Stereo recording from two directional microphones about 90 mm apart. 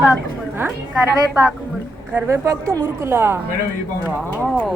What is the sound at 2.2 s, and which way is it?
A woman's voice, 35° right (ahead or behind).